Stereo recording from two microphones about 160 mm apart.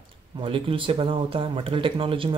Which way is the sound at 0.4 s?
35° right (ahead or behind).